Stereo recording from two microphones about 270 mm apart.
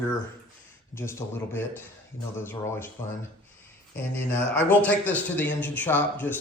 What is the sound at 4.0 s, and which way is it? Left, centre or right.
A man's voice, centre.